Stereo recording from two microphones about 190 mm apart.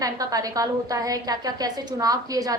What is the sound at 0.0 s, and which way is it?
Speech, 20° right (ahead or behind).